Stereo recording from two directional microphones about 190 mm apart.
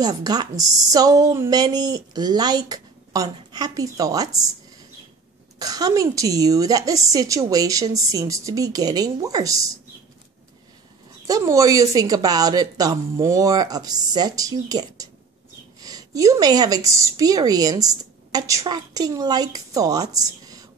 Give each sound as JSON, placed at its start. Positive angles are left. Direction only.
{"t": 0.0, "sound": "a woman's voice", "side_deg": -20}
{"t": 5.6, "sound": "a woman's voice", "side_deg": -20}
{"t": 11.2, "sound": "a woman's voice", "side_deg": -15}